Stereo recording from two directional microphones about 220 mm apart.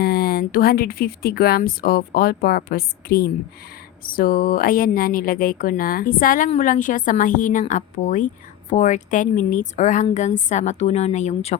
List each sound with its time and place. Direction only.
0.0 s speech: 45° left (ahead or behind)